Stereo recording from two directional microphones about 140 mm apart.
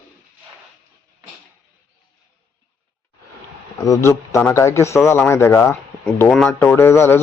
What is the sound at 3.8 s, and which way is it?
A man's voice, 25° left (ahead or behind).